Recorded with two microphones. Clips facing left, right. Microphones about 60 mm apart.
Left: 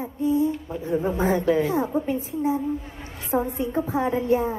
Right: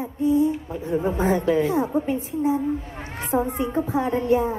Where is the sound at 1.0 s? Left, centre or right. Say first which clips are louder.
Right 1 dB; right.